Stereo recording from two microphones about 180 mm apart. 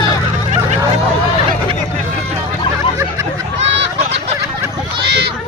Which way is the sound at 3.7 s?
75° right (ahead or behind).